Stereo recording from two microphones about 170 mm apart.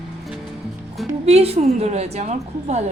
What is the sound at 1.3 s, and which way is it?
A woman's voice, 40° right (ahead or behind).